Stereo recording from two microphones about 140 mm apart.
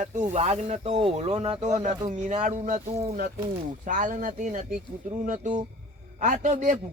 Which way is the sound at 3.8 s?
70° right (ahead or behind).